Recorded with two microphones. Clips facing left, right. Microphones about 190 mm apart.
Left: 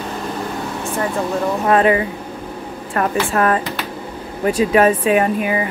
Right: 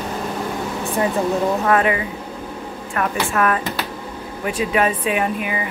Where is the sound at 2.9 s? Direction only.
35° left (ahead or behind).